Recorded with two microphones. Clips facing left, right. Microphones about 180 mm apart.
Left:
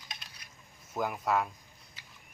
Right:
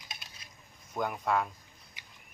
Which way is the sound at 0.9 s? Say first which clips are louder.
Even; 5° left (ahead or behind).